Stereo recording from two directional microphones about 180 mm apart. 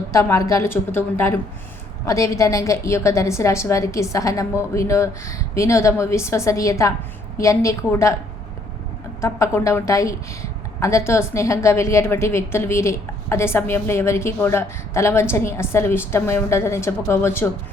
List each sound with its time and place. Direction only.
0.1 s a woman's voice: 15° left (ahead or behind)
9.2 s a woman's voice: 15° left (ahead or behind)